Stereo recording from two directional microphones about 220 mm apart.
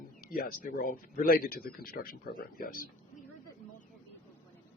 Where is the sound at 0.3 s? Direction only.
40° left (ahead or behind).